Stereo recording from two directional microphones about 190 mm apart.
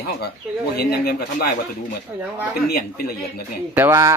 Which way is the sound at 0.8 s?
55° left (ahead or behind).